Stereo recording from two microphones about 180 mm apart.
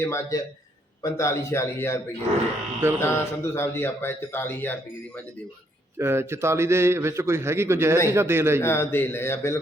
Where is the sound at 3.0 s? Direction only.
15° left (ahead or behind).